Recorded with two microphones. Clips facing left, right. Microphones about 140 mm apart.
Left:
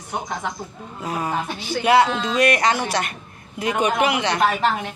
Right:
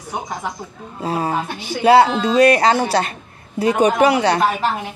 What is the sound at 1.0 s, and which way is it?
A man's voice, 30° right (ahead or behind).